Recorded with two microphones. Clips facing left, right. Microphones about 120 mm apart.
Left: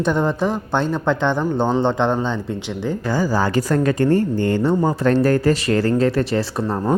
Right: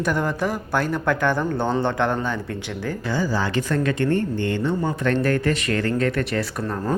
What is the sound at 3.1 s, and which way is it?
Speech, 45° left (ahead or behind).